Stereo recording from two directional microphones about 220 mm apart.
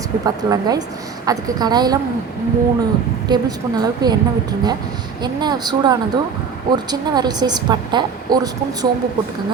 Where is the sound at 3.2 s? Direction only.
20° right (ahead or behind).